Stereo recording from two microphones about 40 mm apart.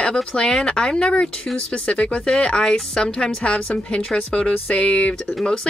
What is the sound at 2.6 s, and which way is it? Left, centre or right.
Speech, centre.